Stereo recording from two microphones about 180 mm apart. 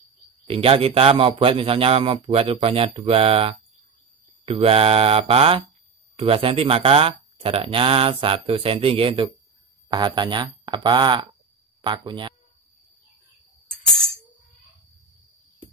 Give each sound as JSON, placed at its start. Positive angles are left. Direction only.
{"t": 0.5, "sound": "speech", "side_deg": -30}